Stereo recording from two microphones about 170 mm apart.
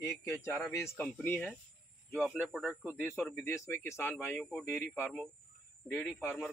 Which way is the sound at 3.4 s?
15° left (ahead or behind).